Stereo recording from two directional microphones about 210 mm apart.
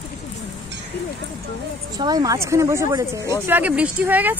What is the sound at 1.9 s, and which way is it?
Speech, 20° right (ahead or behind).